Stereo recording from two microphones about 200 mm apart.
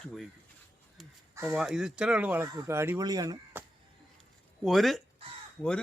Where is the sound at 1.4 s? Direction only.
5° right (ahead or behind).